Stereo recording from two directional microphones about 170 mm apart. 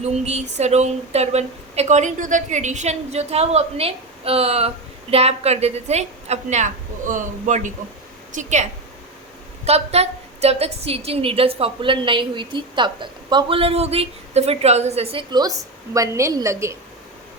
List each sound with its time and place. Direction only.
0.0 s a woman's voice: 40° right (ahead or behind)
9.6 s a woman's voice: 40° right (ahead or behind); by 16.7 s 15° right (ahead or behind)